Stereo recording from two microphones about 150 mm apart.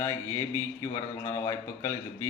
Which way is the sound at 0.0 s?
15° left (ahead or behind).